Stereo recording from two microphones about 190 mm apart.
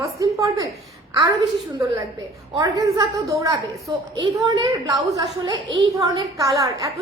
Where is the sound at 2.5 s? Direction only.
20° right (ahead or behind).